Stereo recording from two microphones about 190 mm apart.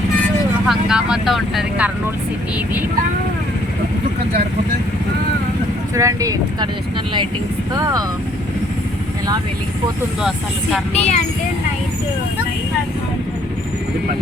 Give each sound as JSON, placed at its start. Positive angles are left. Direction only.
{"t": 0.7, "sound": "speech", "side_deg": -5}
{"t": 5.9, "sound": "speech", "side_deg": -15}
{"t": 7.7, "sound": "speech", "side_deg": -20}
{"t": 10.2, "sound": "speech", "side_deg": 0}
{"t": 10.9, "sound": "speech", "side_deg": 35}